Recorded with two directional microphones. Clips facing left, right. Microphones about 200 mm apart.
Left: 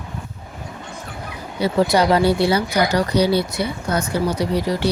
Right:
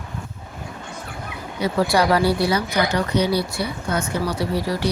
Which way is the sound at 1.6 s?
25° left (ahead or behind).